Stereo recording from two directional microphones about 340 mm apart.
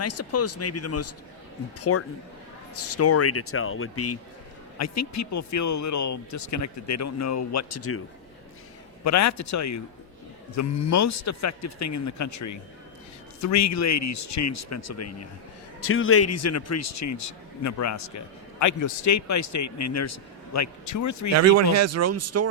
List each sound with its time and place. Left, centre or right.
0.0 s speech: left
9.0 s a man's voice: left
21.3 s speech: right